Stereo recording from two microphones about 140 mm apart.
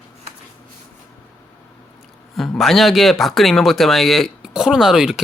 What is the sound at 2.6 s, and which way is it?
Speech, centre (ahead or behind).